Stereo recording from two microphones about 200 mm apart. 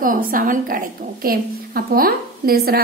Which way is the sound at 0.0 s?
45° right (ahead or behind).